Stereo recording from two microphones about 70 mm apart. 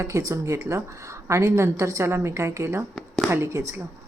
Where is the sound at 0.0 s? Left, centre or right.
Right.